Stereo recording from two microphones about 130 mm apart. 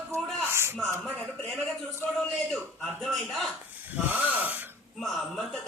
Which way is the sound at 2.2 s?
5° left (ahead or behind).